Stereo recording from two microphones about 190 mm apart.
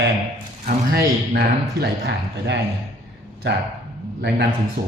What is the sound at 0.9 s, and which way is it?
A man's voice, 50° right (ahead or behind).